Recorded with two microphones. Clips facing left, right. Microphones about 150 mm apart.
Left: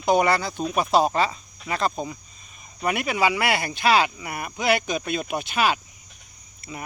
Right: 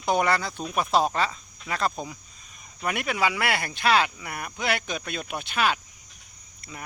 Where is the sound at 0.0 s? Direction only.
5° left (ahead or behind).